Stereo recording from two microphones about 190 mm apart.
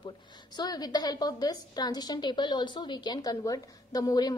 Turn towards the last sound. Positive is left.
turn(degrees=20)  # may be behind; listen again after turning